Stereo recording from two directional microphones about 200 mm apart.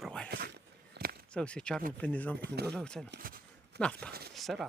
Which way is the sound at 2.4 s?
55° right (ahead or behind).